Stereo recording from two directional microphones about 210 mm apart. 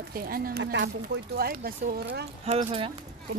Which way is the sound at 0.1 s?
45° right (ahead or behind).